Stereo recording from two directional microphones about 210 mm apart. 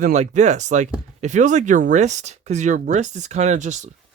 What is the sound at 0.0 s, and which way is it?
Speech, 35° right (ahead or behind).